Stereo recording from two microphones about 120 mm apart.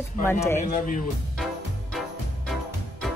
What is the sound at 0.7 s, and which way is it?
Speech, 90° left.